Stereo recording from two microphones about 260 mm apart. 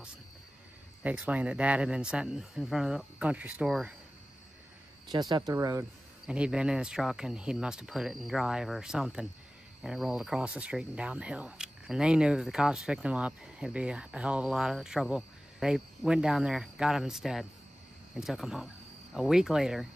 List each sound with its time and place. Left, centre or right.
1.0 s speech: centre
5.1 s speech: centre